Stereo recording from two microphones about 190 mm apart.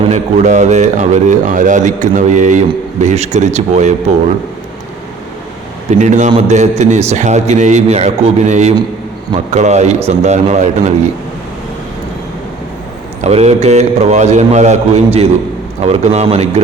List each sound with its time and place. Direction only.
0.1 s a man's voice: 40° right (ahead or behind)
5.9 s a man's voice: 40° right (ahead or behind)
13.2 s a man's voice: 35° right (ahead or behind)